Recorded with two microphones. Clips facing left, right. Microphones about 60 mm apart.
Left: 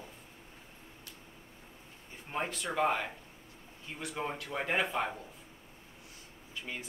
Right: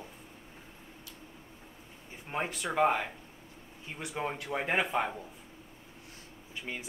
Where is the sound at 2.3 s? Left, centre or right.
Centre.